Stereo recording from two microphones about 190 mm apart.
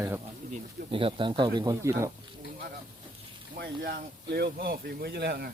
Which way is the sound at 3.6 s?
60° right (ahead or behind).